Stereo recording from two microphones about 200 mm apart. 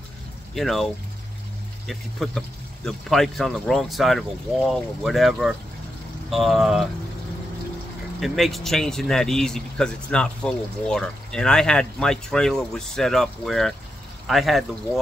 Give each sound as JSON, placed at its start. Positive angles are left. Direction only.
{"t": 0.6, "sound": "speech", "side_deg": 0}
{"t": 1.9, "sound": "speech", "side_deg": 0}
{"t": 8.2, "sound": "speech", "side_deg": 0}